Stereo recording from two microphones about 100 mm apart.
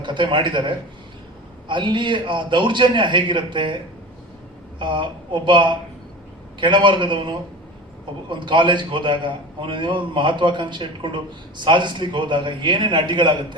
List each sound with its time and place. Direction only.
0.0 s a man's voice: 55° right (ahead or behind)
4.8 s a man's voice: 55° right (ahead or behind)